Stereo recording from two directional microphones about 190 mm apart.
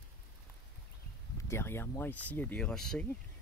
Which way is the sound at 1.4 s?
15° left (ahead or behind).